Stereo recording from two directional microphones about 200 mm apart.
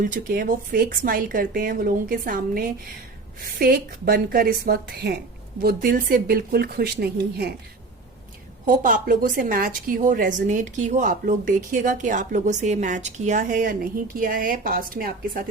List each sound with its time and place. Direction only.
0.0 s speech: 45° right (ahead or behind)
8.6 s a woman's voice: 45° right (ahead or behind)